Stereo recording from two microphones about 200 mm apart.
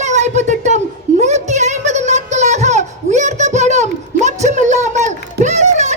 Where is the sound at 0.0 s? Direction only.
35° right (ahead or behind).